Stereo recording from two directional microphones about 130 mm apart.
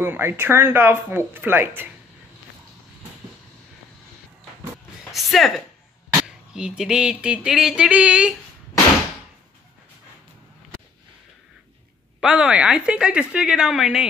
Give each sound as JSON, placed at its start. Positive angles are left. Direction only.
{"t": 0.0, "sound": "speech", "side_deg": -15}
{"t": 5.1, "sound": "speech", "side_deg": 0}
{"t": 12.2, "sound": "speech", "side_deg": -5}